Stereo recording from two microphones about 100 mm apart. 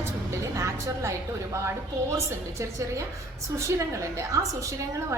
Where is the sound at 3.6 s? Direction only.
30° right (ahead or behind).